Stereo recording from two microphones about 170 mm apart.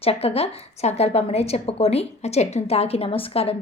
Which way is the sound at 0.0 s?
35° left (ahead or behind).